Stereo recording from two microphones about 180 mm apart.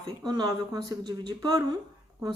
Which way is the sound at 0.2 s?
25° right (ahead or behind).